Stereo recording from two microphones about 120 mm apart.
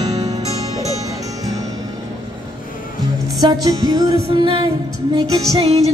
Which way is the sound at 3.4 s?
30° right (ahead or behind).